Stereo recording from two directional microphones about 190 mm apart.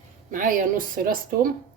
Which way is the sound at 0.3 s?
45° right (ahead or behind).